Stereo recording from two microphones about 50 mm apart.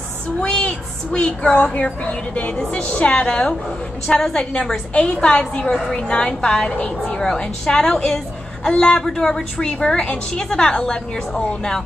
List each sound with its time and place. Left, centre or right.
0.4 s a woman's voice: centre